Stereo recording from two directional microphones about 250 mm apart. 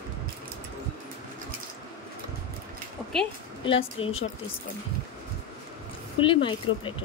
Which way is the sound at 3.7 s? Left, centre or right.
Left.